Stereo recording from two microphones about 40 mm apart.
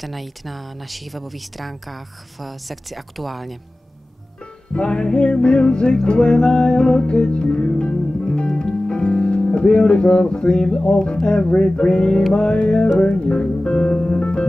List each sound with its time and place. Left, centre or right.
0.0 s speech: centre
4.7 s music: left
13.1 s speech: left